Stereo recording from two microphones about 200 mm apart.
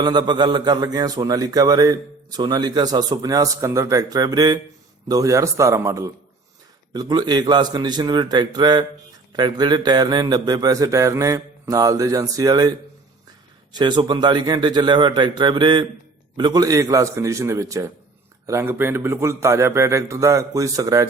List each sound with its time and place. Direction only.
0.0 s a man's voice: 20° right (ahead or behind)
13.7 s a man's voice: 20° right (ahead or behind)